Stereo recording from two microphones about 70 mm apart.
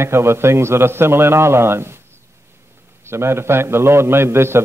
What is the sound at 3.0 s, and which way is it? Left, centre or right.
Speech, right.